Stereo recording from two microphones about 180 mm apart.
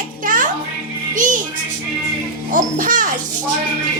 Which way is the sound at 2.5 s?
45° right (ahead or behind).